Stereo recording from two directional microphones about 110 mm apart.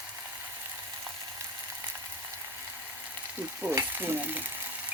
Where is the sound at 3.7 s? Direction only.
20° right (ahead or behind).